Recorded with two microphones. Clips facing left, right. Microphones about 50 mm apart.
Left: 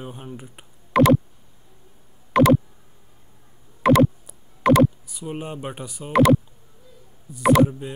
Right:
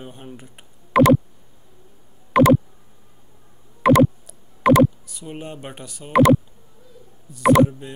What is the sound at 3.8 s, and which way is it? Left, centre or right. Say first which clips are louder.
Clicking: right 2 dB; centre.